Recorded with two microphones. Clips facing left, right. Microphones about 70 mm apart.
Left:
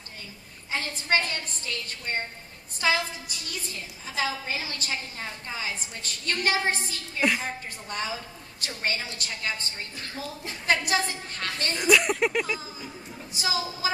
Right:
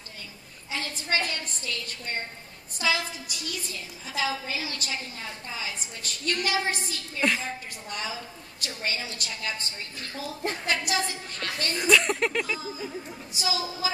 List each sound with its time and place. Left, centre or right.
0.7 s a woman's voice: left
7.2 s speech: centre
7.9 s a woman's voice: left
11.8 s speech: centre
13.3 s a woman's voice: left